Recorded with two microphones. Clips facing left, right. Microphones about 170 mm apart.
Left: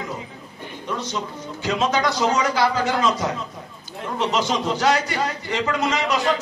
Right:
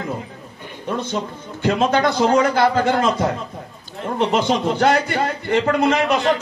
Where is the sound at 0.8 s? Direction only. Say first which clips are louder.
Right 4 dB; 55° right (ahead or behind).